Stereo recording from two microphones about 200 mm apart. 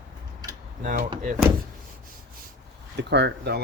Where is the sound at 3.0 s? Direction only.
60° right (ahead or behind).